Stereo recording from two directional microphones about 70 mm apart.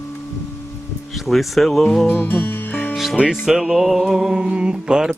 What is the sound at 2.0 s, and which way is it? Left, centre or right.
Music, left.